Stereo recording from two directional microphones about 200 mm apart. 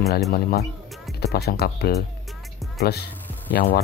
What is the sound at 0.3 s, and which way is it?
Speech, 50° left (ahead or behind).